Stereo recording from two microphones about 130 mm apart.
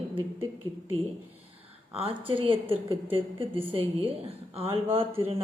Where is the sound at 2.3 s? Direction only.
45° right (ahead or behind).